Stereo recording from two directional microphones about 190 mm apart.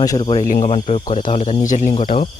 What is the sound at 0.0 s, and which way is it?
Speech, 20° left (ahead or behind).